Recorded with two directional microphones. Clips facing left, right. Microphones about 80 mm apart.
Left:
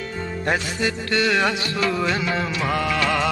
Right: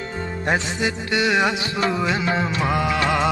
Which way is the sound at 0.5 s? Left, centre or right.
Centre.